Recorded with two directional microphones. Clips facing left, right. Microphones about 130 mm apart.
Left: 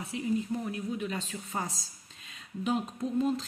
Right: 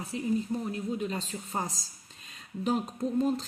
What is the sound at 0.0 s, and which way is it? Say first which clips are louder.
Speech: right 1 dB; 35° right (ahead or behind).